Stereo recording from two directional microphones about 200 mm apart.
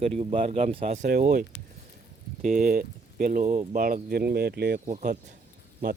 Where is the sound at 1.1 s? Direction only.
45° right (ahead or behind).